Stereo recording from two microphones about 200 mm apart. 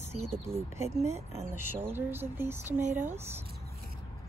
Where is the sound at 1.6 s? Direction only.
10° right (ahead or behind).